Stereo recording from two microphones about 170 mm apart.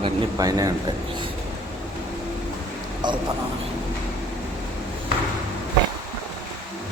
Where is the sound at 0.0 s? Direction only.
20° right (ahead or behind).